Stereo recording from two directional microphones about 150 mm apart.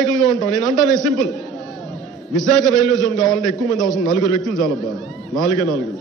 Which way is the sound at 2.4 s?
Centre (ahead or behind).